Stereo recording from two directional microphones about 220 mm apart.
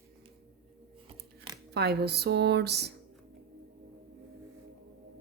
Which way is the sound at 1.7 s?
45° right (ahead or behind).